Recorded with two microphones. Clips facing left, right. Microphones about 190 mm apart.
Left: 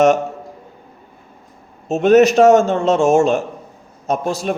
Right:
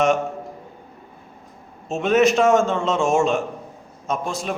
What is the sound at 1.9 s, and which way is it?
A man's voice, 40° left (ahead or behind).